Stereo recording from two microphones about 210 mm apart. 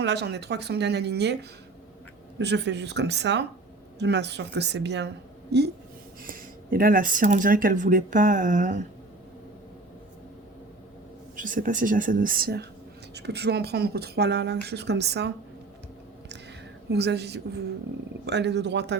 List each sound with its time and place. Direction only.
0.0 s speech: 55° right (ahead or behind)
6.2 s speech: 45° right (ahead or behind)
11.3 s speech: 40° right (ahead or behind)
16.9 s speech: 50° right (ahead or behind)